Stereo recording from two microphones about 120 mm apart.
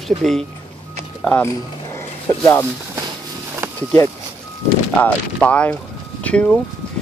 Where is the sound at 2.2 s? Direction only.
25° left (ahead or behind).